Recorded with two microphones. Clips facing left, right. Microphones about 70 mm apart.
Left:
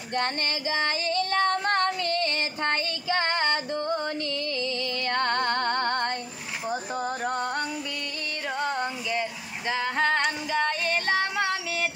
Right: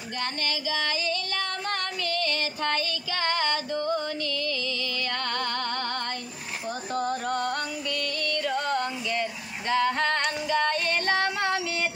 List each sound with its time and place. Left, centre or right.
0.1 s female singing: left
5.0 s music: left
6.7 s music: centre
8.5 s female singing: centre